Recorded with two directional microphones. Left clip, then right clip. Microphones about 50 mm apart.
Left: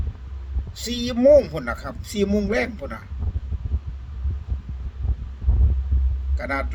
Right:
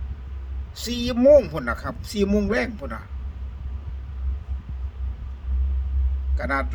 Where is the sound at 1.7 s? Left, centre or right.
Centre.